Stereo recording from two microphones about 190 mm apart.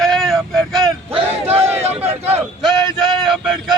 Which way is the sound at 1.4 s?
10° right (ahead or behind).